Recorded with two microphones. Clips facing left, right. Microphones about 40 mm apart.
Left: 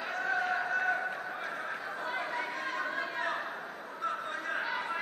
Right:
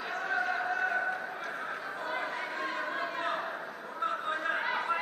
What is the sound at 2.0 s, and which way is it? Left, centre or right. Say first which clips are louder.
Chatter: even; centre.